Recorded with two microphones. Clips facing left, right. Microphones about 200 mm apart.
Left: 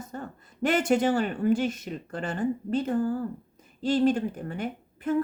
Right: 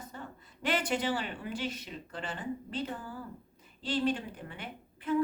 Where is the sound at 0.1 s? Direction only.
45° left (ahead or behind).